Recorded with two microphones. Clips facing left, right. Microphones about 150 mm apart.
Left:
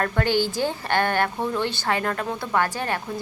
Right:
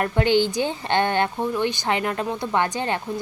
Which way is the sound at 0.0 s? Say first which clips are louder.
Right 3 dB; 20° right (ahead or behind).